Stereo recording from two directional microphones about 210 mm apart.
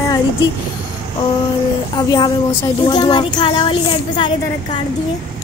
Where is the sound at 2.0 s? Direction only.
20° left (ahead or behind).